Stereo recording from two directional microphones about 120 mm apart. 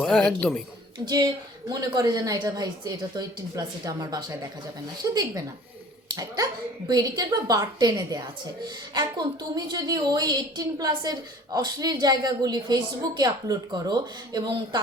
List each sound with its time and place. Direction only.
0.0 s a man's voice: 5° left (ahead or behind)
0.9 s a woman's voice: 35° right (ahead or behind)
6.1 s a woman's voice: 30° right (ahead or behind)